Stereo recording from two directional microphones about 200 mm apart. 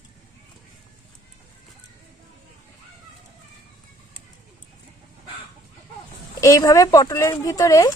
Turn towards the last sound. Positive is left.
turn(degrees=20)  # may be behind; listen again after turning